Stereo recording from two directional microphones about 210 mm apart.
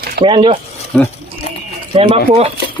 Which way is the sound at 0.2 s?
25° right (ahead or behind).